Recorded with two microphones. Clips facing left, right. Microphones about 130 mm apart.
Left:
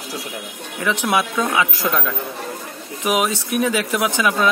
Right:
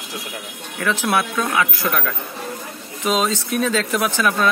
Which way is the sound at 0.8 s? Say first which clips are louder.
Even; 15° left (ahead or behind).